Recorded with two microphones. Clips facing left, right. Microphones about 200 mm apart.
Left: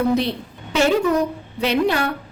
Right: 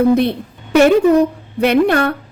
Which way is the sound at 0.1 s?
55° right (ahead or behind).